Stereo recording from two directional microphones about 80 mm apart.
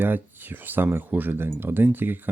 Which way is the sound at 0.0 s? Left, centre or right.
Right.